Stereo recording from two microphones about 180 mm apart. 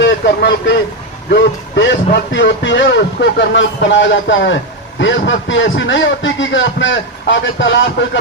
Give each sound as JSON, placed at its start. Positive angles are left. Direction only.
{"t": 0.0, "sound": "a man's voice", "side_deg": 75}